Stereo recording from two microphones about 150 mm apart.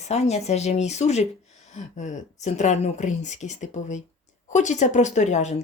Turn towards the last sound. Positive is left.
turn(degrees=50)  # may be behind; listen again after turning